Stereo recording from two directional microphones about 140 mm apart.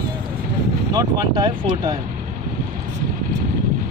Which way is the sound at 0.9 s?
30° right (ahead or behind).